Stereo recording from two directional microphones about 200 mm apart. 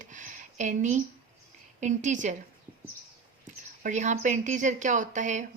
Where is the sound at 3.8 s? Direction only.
35° right (ahead or behind).